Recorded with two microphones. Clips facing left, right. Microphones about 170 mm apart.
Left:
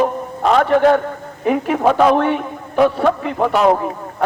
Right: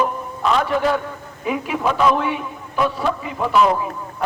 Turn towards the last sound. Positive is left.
turn(degrees=60)  # may be behind; listen again after turning